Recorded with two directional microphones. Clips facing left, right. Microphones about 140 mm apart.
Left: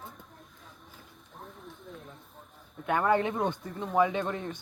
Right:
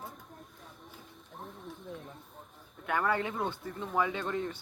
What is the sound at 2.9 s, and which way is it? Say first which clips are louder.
Speech: left 5 dB; 20° left (ahead or behind).